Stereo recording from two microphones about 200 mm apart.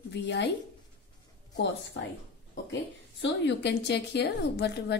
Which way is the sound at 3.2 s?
60° left (ahead or behind).